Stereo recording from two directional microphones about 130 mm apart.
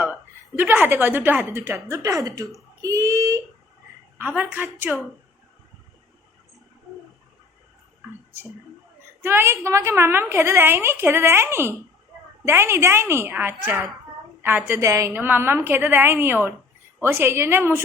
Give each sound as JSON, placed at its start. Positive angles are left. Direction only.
{"t": 0.0, "sound": "a woman's voice", "side_deg": -15}
{"t": 4.2, "sound": "a woman's voice", "side_deg": -15}
{"t": 9.2, "sound": "a woman's voice", "side_deg": -20}
{"t": 14.8, "sound": "a woman's voice", "side_deg": -25}